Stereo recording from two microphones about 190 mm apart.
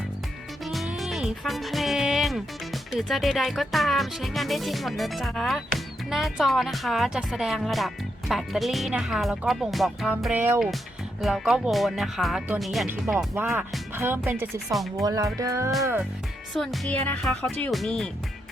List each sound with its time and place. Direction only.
0.6 s speech: centre (ahead or behind)
13.1 s speech: 15° right (ahead or behind)
14.7 s speech: centre (ahead or behind)
15.0 s speech: 20° right (ahead or behind)
16.6 s speech: centre (ahead or behind)